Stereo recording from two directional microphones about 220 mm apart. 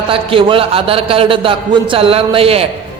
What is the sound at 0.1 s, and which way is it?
A man's voice, 25° right (ahead or behind).